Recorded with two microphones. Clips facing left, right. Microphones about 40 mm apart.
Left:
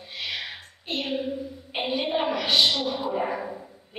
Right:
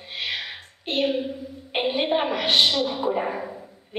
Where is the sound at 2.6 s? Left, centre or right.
Right.